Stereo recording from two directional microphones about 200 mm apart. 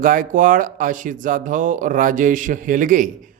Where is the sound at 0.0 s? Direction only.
45° right (ahead or behind).